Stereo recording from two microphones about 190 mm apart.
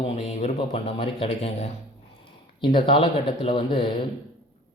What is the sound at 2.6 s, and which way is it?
A man's voice, 25° left (ahead or behind).